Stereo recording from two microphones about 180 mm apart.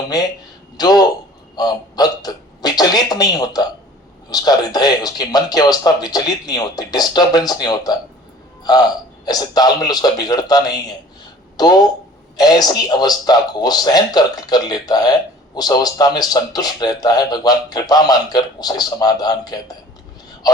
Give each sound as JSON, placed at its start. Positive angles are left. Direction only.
{"t": 0.8, "sound": "a man's voice", "side_deg": 20}
{"t": 9.2, "sound": "a man's voice", "side_deg": 20}